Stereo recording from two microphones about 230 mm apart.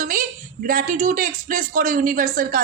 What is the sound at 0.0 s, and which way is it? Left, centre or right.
A woman's voice, right.